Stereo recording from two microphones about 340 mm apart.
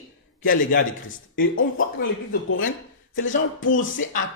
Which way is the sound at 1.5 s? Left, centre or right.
Left.